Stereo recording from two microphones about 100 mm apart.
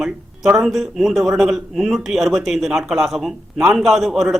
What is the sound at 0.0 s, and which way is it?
A man's voice, 5° right (ahead or behind).